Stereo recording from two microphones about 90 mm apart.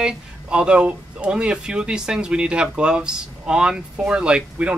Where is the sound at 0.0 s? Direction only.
10° right (ahead or behind).